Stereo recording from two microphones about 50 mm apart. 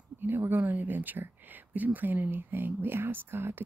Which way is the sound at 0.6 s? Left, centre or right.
Right.